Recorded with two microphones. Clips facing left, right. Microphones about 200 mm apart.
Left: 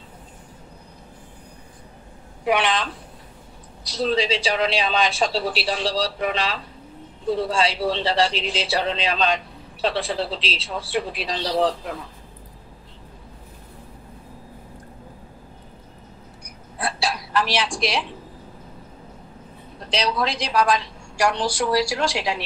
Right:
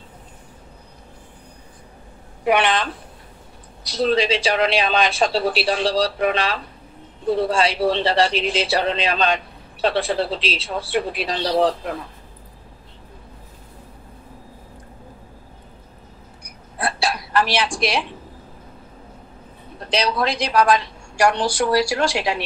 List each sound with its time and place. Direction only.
2.4 s speech: 60° right (ahead or behind)
3.9 s speech: 65° right (ahead or behind)
16.7 s hiccup: 60° right (ahead or behind)
19.9 s speech: 60° right (ahead or behind)